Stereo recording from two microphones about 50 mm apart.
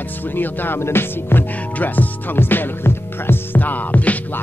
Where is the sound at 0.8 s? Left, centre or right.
Left.